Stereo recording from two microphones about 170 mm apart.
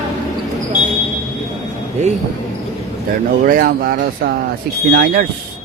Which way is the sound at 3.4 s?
55° right (ahead or behind).